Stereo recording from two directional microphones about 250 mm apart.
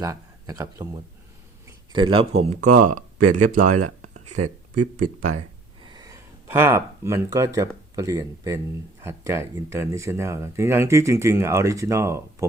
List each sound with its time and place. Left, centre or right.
0.0 s a man's voice: centre; by 3.0 s right
3.2 s speech: right
3.8 s a sound: right
5.0 s speech: right
5.4 s speech: centre